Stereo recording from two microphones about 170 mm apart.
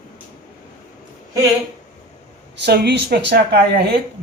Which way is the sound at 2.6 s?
75° right (ahead or behind).